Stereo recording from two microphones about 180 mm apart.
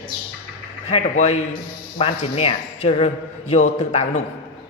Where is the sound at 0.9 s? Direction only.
40° left (ahead or behind).